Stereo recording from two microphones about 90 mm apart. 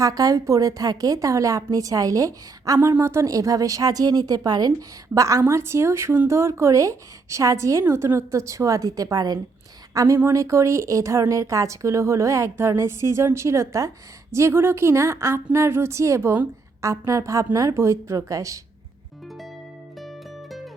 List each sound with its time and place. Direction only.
0.0 s speech: 40° right (ahead or behind)
5.1 s a woman's voice: 35° right (ahead or behind)
20.0 s music: centre (ahead or behind)